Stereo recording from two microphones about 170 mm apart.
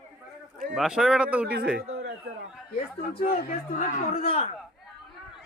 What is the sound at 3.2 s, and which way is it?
A man's voice, 55° left (ahead or behind).